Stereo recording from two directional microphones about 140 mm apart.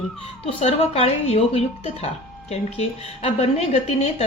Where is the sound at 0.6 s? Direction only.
45° left (ahead or behind).